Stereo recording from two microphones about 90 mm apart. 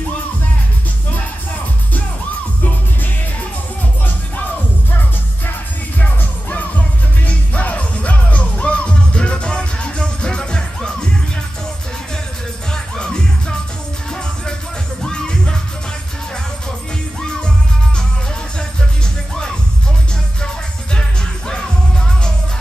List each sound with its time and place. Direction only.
5.9 s music: 15° left (ahead or behind)
12.7 s music: 10° left (ahead or behind)
15.0 s music: 10° left (ahead or behind)
20.9 s music: 10° left (ahead or behind)